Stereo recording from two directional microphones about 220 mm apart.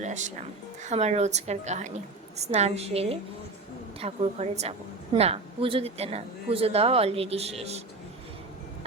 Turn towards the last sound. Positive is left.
turn(degrees=-30)  # may be behind; listen again after turning